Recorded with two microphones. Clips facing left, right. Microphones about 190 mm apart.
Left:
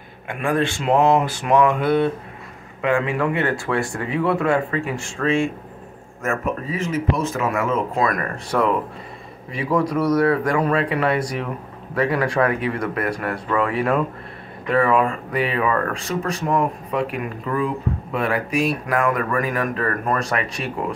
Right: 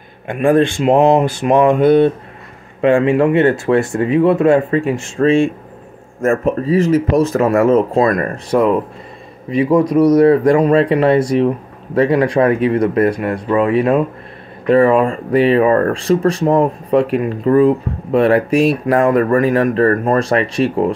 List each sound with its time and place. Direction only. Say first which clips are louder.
0.3 s speech: right 9 dB; 30° right (ahead or behind)